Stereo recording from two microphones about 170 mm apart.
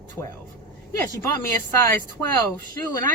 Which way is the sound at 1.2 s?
15° left (ahead or behind).